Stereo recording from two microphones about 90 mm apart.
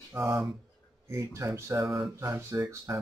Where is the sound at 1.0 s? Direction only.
30° right (ahead or behind).